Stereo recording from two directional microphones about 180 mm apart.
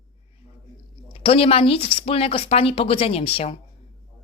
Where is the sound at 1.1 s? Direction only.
30° left (ahead or behind).